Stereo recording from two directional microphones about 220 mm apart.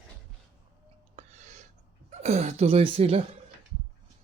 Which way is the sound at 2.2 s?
30° right (ahead or behind).